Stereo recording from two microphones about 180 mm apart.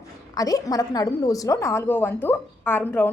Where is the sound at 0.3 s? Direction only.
20° left (ahead or behind).